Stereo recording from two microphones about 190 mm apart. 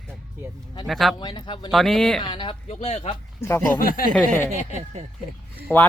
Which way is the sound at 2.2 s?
25° left (ahead or behind).